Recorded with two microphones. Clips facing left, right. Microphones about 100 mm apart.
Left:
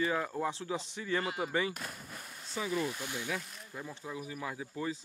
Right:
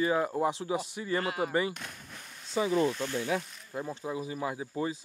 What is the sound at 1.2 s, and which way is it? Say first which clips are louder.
Speech: right 4 dB; 70° right (ahead or behind).